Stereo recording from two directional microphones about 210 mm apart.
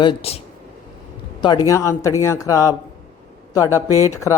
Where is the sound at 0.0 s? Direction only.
25° left (ahead or behind).